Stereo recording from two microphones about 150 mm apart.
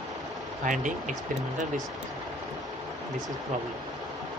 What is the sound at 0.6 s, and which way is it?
Speech, 60° right (ahead or behind).